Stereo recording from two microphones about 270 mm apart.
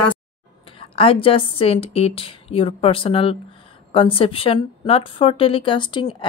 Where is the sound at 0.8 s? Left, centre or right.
Centre.